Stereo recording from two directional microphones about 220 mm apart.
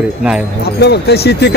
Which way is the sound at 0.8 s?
50° left (ahead or behind).